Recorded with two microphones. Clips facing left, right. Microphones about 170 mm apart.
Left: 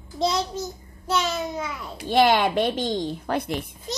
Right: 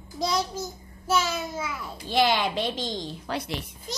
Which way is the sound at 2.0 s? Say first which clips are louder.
Left 5 dB; 55° left (ahead or behind).